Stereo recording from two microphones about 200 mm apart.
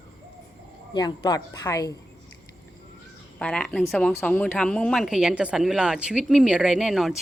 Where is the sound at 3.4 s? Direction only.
5° left (ahead or behind).